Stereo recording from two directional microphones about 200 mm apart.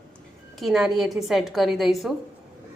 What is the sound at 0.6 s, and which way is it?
A woman's voice, centre (ahead or behind).